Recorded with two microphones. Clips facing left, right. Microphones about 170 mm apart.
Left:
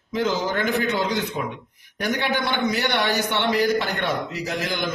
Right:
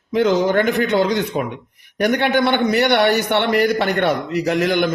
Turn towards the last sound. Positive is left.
turn(degrees=-65)  # may be behind; listen again after turning